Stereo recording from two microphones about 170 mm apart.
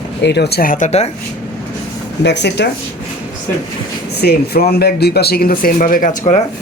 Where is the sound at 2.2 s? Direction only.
90° left.